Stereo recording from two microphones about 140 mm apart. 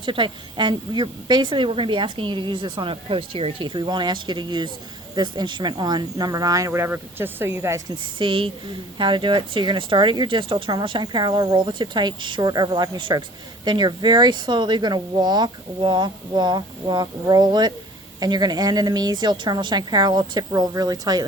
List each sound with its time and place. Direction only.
0.0 s a woman's voice: 35° right (ahead or behind); by 7.9 s 20° right (ahead or behind)
8.2 s a woman's voice: 35° right (ahead or behind)